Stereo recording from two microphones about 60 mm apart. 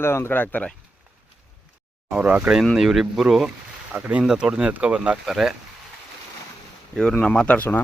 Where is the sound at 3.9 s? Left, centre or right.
Right.